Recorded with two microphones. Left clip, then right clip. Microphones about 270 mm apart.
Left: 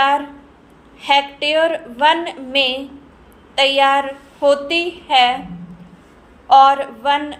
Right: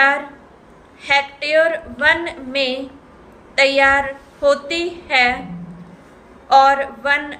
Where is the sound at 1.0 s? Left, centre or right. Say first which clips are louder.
Left 2 dB; centre.